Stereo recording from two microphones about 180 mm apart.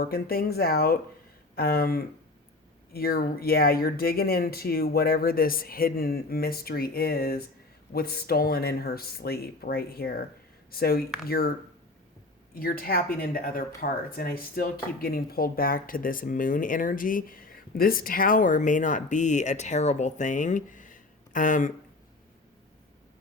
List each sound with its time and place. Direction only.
0.0 s speech: 55° left (ahead or behind)
12.5 s speech: 55° left (ahead or behind)